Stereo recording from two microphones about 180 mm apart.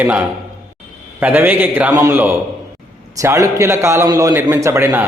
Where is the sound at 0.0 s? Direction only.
5° right (ahead or behind).